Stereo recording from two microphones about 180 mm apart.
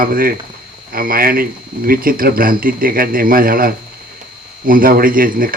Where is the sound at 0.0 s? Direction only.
55° right (ahead or behind).